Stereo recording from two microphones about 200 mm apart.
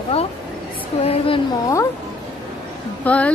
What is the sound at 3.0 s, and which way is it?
Speech, 5° left (ahead or behind).